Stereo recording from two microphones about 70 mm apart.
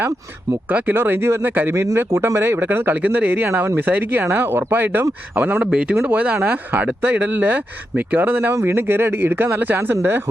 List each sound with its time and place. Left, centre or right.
0.7 s speech: right
0.9 s speech: right
1.7 s speech: right